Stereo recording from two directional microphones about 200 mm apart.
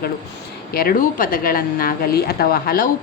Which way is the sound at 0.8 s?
45° left (ahead or behind).